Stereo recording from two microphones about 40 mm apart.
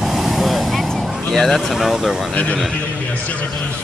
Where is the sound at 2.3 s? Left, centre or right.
Left.